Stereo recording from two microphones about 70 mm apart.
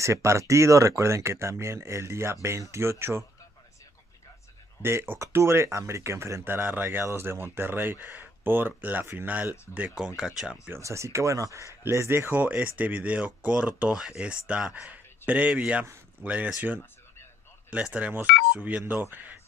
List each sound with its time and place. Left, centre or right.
0.0 s speech: right
4.8 s speech: right
9.8 s speech: centre
10.8 s speech: right
11.8 s speech: right
12.3 s speech: right
17.9 s a man's voice: right